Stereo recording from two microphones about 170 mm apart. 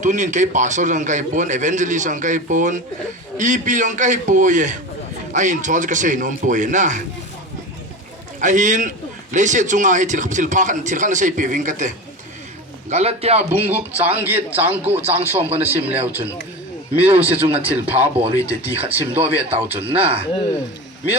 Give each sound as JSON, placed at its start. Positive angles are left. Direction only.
{"t": 0.0, "sound": "a man's voice", "side_deg": -45}
{"t": 8.4, "sound": "a man's voice", "side_deg": -45}
{"t": 12.9, "sound": "a man's voice", "side_deg": -40}
{"t": 13.5, "sound": "speech", "side_deg": -10}